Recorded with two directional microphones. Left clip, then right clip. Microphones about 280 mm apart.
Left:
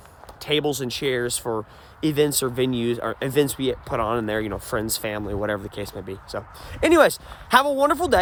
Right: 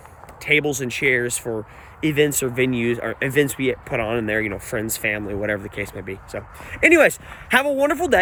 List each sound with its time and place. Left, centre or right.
0.4 s speech: centre